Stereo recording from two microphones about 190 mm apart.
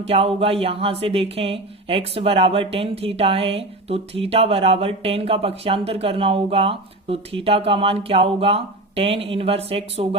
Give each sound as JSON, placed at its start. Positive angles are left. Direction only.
{"t": 0.1, "sound": "speech", "side_deg": -30}